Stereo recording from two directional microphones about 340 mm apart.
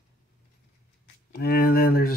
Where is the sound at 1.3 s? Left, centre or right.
Left.